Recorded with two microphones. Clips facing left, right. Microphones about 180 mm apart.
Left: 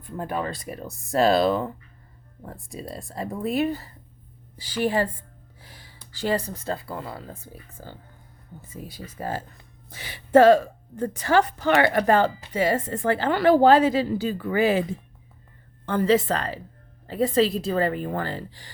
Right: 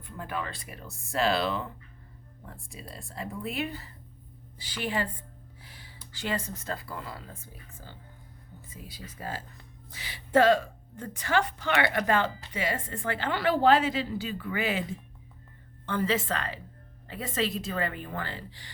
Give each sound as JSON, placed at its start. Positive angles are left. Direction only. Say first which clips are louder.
{"t": 0.2, "sound": "a woman's voice", "louder": "left 7 dB", "side_deg": 40}
{"t": 5.6, "sound": "a sound", "louder": "left 4 dB", "side_deg": 40}
{"t": 6.1, "sound": "a woman's voice", "louder": "left 7 dB", "side_deg": 35}
{"t": 15.9, "sound": "a woman's voice", "louder": "left 8 dB", "side_deg": 40}